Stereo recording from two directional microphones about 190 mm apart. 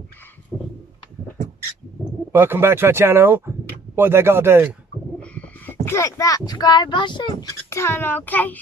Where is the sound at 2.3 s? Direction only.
10° right (ahead or behind).